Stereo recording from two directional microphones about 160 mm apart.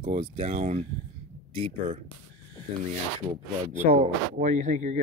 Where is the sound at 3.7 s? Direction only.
45° right (ahead or behind).